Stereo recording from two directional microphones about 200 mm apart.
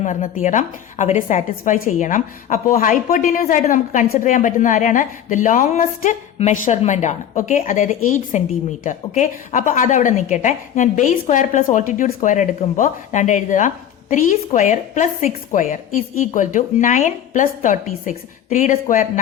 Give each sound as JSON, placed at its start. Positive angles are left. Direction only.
{"t": 0.0, "sound": "a woman's voice", "side_deg": 40}